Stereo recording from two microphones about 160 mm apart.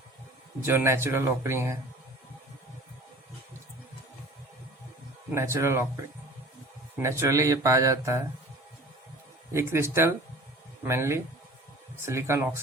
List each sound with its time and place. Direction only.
0.6 s speech: 15° right (ahead or behind)
5.3 s speech: 15° right (ahead or behind)
6.9 s speech: 15° right (ahead or behind)
9.5 s speech: 15° right (ahead or behind)